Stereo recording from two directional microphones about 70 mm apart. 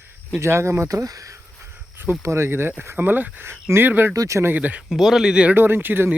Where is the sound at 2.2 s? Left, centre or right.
Right.